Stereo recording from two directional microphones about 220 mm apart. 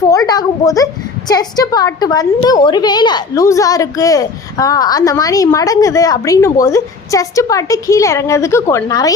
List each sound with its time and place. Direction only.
0.1 s a woman's voice: 15° left (ahead or behind)